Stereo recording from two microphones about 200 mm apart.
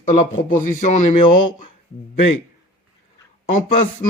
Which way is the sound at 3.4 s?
40° left (ahead or behind).